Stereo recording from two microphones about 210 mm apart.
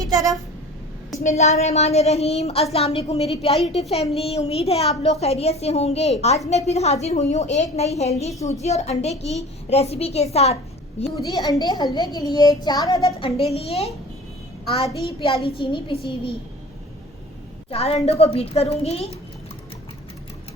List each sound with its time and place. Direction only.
0.0 s speech: 15° right (ahead or behind)
1.2 s a woman's voice: 35° left (ahead or behind)
11.3 s a child's voice: 15° left (ahead or behind)
15.4 s a child's voice: 25° left (ahead or behind)
17.7 s a child's voice: 30° left (ahead or behind)